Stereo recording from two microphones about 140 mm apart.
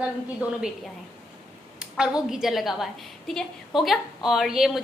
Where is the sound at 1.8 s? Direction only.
5° right (ahead or behind).